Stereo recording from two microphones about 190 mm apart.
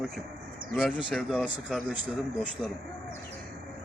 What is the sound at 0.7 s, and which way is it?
Speech, centre (ahead or behind).